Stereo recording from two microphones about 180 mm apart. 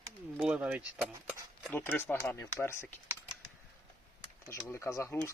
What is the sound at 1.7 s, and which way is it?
Speech, 10° left (ahead or behind).